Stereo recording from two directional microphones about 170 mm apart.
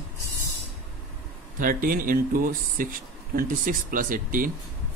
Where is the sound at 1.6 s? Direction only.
55° right (ahead or behind).